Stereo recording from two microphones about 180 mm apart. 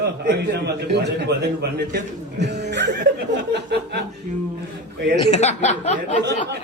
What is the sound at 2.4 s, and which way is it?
Speech, 70° right (ahead or behind).